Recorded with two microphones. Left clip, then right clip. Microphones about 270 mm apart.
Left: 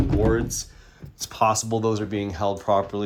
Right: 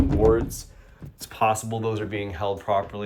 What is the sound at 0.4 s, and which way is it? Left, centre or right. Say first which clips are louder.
Speech: left 5 dB; left.